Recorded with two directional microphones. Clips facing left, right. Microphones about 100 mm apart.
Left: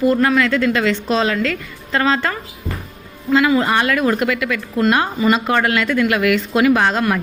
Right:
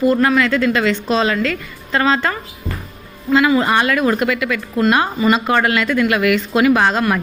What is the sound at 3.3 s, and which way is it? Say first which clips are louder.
A woman's voice: right 1 dB; 20° right (ahead or behind).